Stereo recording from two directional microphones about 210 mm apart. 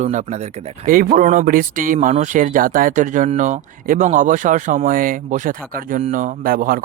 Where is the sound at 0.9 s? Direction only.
40° right (ahead or behind).